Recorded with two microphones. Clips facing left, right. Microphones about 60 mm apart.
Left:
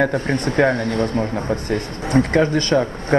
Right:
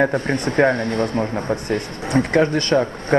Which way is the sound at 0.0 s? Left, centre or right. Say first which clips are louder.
Even; right.